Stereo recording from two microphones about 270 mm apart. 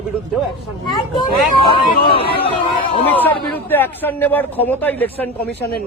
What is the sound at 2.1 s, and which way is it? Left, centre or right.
Speech, left.